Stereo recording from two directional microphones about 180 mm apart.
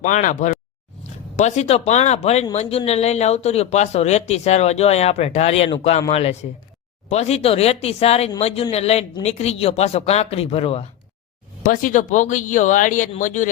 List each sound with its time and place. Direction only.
0.0 s speech: 45° left (ahead or behind)
11.6 s speech: 50° left (ahead or behind)